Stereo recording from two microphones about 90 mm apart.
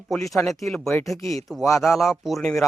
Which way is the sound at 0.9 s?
35° left (ahead or behind).